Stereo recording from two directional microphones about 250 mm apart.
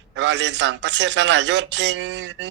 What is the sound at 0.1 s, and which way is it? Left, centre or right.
Speech, right.